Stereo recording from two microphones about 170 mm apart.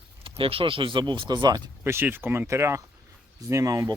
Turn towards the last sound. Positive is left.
turn(degrees=-20)  # may be behind; listen again after turning